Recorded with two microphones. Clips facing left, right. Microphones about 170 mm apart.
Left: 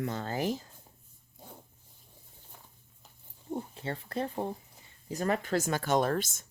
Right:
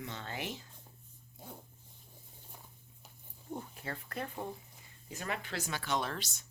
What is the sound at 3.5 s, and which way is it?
Speech, 30° left (ahead or behind).